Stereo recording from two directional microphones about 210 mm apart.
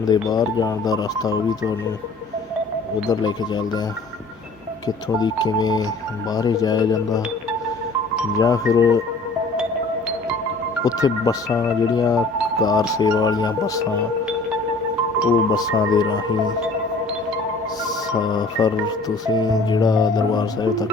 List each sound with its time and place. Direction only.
0.0 s speech: 20° left (ahead or behind)
3.1 s music: 20° left (ahead or behind)
4.9 s music: 20° left (ahead or behind)
8.4 s speech: 15° left (ahead or behind)
10.8 s speech: 15° left (ahead or behind)
15.5 s music: 20° left (ahead or behind)
17.8 s music: 20° left (ahead or behind)